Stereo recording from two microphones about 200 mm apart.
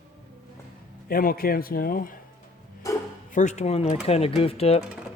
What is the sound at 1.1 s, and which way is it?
A man's voice, 45° left (ahead or behind).